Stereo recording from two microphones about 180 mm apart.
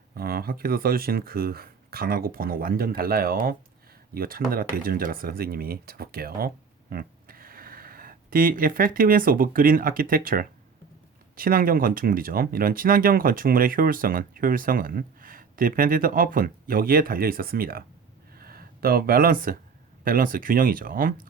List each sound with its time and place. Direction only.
0.1 s speech: 55° right (ahead or behind)